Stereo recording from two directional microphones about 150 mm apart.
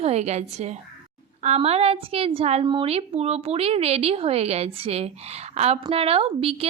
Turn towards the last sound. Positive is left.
turn(degrees=-40)  # may be behind; listen again after turning